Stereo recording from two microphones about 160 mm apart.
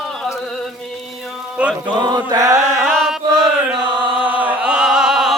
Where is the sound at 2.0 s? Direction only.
25° right (ahead or behind).